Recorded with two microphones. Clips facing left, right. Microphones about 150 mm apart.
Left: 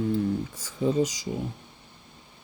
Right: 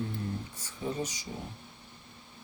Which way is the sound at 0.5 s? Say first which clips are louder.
Left 12 dB; 90° left.